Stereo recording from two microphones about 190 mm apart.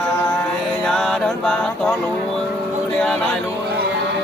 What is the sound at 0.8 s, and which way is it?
Music, 5° left (ahead or behind).